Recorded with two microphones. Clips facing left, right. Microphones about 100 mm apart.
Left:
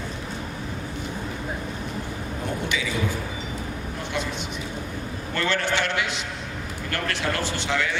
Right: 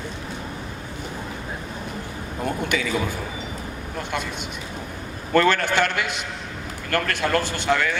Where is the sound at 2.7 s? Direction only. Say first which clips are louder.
Right 5 dB; 50° right (ahead or behind).